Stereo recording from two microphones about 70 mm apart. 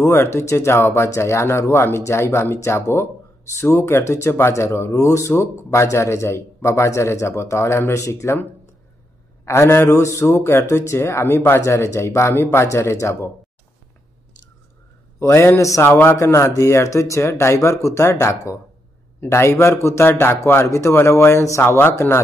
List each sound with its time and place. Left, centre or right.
0.0 s speech: left
9.4 s speech: left
15.1 s speech: left
16.2 s speech: left
20.6 s speech: left